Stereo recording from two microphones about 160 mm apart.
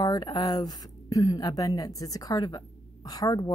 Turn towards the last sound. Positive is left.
turn(degrees=25)  # may be behind; listen again after turning